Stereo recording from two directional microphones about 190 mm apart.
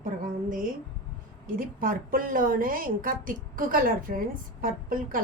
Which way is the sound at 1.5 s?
50° right (ahead or behind).